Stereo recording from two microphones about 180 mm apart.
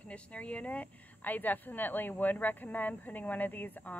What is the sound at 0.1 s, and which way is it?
Speech, 5° left (ahead or behind).